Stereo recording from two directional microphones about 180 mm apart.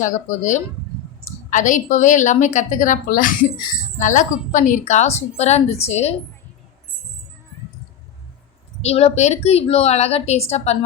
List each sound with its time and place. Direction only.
0.0 s a woman's voice: 45° left (ahead or behind)
8.8 s a woman's voice: 35° left (ahead or behind)